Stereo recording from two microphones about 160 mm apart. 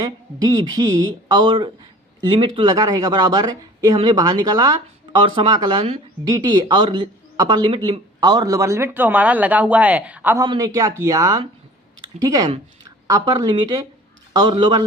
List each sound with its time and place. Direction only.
0.0 s speech: 25° right (ahead or behind)
10.3 s speech: 25° right (ahead or behind)